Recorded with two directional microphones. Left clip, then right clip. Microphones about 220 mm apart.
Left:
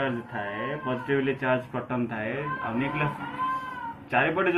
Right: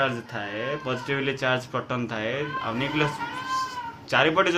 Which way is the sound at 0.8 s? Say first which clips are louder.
Left 3 dB; 20° right (ahead or behind).